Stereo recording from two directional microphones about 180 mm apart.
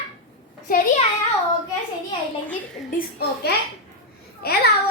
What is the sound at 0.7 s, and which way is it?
Speech, 55° left (ahead or behind).